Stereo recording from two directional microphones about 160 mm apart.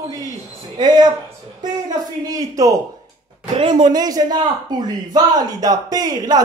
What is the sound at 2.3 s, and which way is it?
Speech, 20° right (ahead or behind).